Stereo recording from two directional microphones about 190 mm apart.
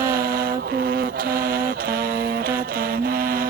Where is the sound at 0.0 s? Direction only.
50° right (ahead or behind).